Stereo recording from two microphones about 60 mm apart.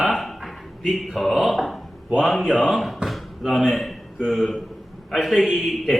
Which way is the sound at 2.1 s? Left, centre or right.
Centre.